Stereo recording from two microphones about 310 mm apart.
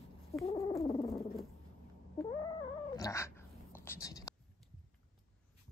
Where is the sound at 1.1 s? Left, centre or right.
Centre.